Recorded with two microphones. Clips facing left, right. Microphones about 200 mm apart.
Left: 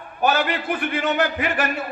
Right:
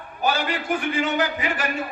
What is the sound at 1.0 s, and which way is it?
Speech, 60° left (ahead or behind).